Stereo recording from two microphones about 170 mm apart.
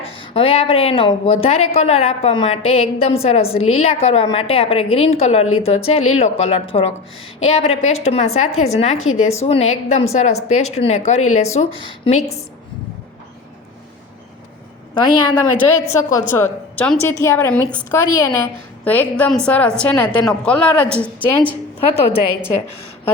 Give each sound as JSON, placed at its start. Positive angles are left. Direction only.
{"t": 0.0, "sound": "a woman's voice", "side_deg": 30}
{"t": 14.9, "sound": "a woman's voice", "side_deg": 25}
{"t": 15.5, "sound": "a woman's voice", "side_deg": 15}